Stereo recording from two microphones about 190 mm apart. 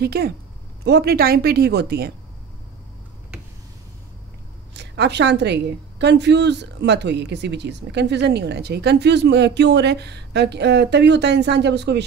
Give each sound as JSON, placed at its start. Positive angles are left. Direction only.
{"t": 0.0, "sound": "a woman's voice", "side_deg": -55}
{"t": 4.7, "sound": "a woman's voice", "side_deg": -65}